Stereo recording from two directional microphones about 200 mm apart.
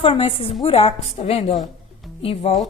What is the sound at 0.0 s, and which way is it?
A woman's voice, 30° left (ahead or behind).